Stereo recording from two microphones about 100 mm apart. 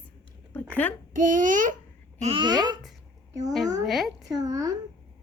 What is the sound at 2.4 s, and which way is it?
Speech, 45° right (ahead or behind).